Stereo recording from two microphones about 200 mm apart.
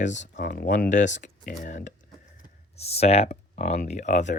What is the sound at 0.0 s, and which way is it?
Speech, 35° left (ahead or behind).